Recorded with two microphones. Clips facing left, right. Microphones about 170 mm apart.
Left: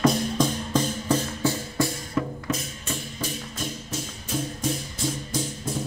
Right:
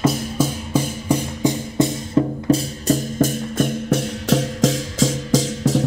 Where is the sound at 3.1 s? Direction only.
50° right (ahead or behind).